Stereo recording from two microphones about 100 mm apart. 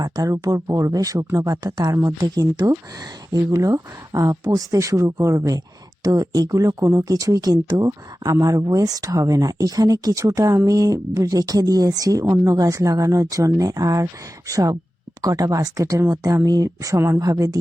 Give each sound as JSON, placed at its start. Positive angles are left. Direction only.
{"t": 0.0, "sound": "speech", "side_deg": -35}